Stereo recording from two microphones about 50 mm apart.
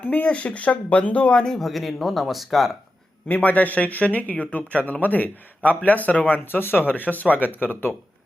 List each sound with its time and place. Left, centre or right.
0.0 s speech: left
1.5 s speech: centre
3.2 s speech: left
6.3 s speech: left